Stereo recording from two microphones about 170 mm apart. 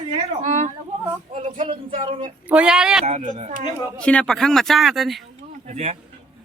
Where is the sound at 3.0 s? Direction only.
40° right (ahead or behind).